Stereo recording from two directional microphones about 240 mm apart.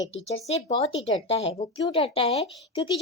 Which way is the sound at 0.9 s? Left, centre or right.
Left.